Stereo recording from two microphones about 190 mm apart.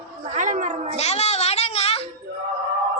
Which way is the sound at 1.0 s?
35° left (ahead or behind).